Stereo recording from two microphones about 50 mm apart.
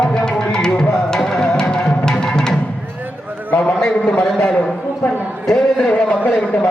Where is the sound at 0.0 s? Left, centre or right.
Centre.